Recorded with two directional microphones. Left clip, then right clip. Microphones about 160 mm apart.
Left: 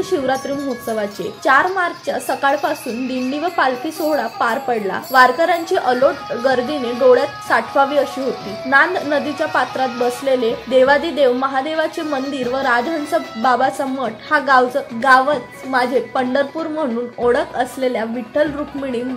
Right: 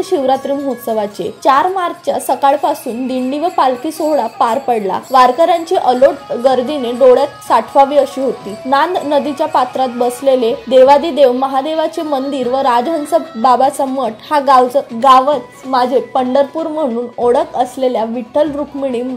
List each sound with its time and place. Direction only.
0.0 s a woman's voice: 20° right (ahead or behind)